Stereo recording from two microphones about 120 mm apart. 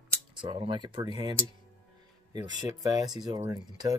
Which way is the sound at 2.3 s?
35° right (ahead or behind).